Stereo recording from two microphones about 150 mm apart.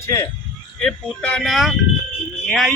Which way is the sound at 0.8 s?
5° left (ahead or behind).